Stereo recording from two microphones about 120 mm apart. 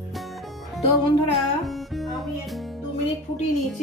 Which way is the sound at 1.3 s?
Centre (ahead or behind).